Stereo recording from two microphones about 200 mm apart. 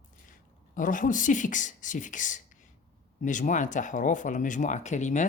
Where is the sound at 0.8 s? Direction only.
40° left (ahead or behind).